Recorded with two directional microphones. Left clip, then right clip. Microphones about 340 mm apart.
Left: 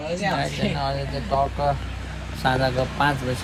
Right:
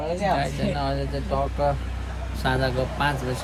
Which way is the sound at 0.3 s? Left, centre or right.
Centre.